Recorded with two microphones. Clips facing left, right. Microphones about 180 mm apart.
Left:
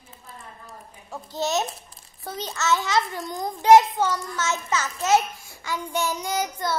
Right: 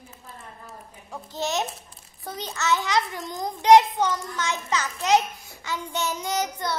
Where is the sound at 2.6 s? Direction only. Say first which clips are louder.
Left 1 dB; 15° right (ahead or behind).